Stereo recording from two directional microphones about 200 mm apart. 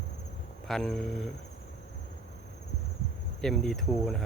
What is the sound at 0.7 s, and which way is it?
Insect, centre (ahead or behind).